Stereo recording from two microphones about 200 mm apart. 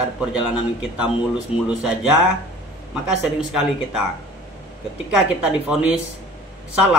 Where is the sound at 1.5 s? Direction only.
30° left (ahead or behind).